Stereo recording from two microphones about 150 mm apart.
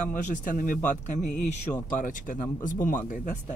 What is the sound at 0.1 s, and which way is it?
Speech, 60° left (ahead or behind).